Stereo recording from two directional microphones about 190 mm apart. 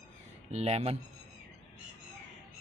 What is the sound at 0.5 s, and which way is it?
Speech, 35° right (ahead or behind).